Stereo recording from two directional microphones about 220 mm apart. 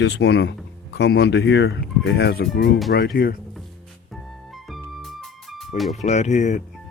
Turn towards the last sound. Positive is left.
turn(degrees=30)  # may be behind; listen again after turning